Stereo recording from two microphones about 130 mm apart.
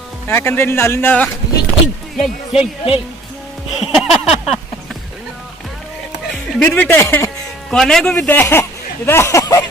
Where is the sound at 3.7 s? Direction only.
5° right (ahead or behind).